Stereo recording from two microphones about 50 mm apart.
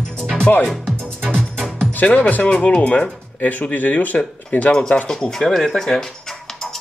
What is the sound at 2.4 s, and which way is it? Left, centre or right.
Speech, left.